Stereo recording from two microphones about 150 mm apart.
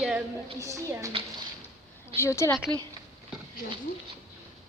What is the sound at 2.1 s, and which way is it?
Speech, 15° left (ahead or behind).